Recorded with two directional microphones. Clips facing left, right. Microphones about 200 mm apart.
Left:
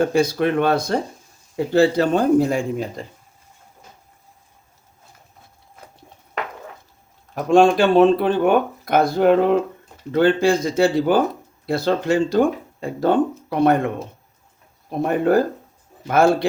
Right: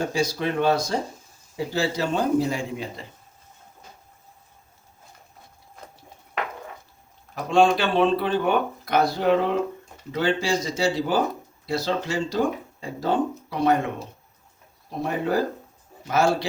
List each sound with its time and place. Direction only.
0.0 s speech: 55° left (ahead or behind)
7.5 s speech: 45° left (ahead or behind)